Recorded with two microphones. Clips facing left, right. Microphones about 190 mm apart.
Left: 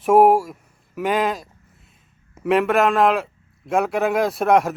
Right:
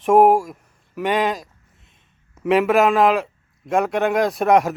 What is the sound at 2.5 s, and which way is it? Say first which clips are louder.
A man's voice: right 2 dB; centre (ahead or behind).